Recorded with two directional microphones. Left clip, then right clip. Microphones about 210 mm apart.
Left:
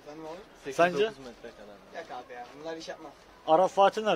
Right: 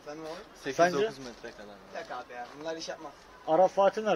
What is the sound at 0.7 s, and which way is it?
Speech, 20° left (ahead or behind).